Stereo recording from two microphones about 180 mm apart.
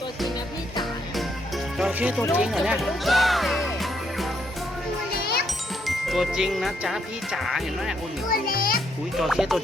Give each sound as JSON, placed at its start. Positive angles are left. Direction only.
{"t": 1.8, "sound": "speech", "side_deg": -5}
{"t": 5.9, "sound": "speech", "side_deg": 0}
{"t": 8.3, "sound": "a child's voice", "side_deg": 55}
{"t": 9.1, "sound": "speech", "side_deg": 0}